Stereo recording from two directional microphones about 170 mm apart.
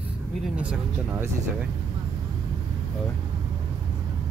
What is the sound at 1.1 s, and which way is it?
Speech, 10° right (ahead or behind).